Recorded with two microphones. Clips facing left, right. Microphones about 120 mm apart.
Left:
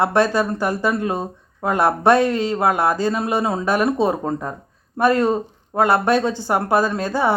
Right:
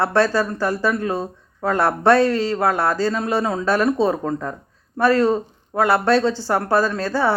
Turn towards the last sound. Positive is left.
turn(degrees=15)  # may be behind; listen again after turning